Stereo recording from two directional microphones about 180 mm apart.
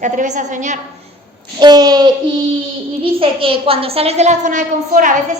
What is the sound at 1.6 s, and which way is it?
A woman's voice, 20° right (ahead or behind).